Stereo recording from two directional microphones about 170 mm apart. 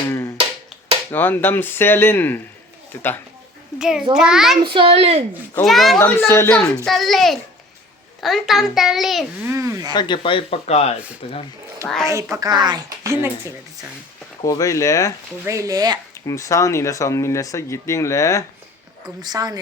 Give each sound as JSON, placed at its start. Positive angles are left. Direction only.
{"t": 1.1, "sound": "speech", "side_deg": 10}
{"t": 3.8, "sound": "a child's voice", "side_deg": -5}
{"t": 4.6, "sound": "a woman's voice", "side_deg": -30}
{"t": 5.6, "sound": "a child's voice", "side_deg": 0}
{"t": 6.0, "sound": "speech", "side_deg": 15}
{"t": 6.8, "sound": "a child's voice", "side_deg": 0}
{"t": 9.4, "sound": "speech", "side_deg": -15}
{"t": 9.9, "sound": "speech", "side_deg": 25}
{"t": 12.0, "sound": "a woman's voice", "side_deg": -20}
{"t": 14.4, "sound": "speech", "side_deg": 20}
{"t": 15.4, "sound": "a woman's voice", "side_deg": -20}
{"t": 16.2, "sound": "speech", "side_deg": 20}
{"t": 19.2, "sound": "a woman's voice", "side_deg": -20}